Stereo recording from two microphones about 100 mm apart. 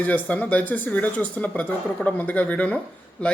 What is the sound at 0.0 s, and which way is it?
Speech, 15° left (ahead or behind).